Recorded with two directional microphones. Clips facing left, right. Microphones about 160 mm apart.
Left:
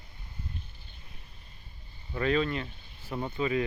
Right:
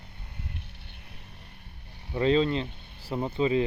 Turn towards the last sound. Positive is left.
turn(degrees=-25)  # may be behind; listen again after turning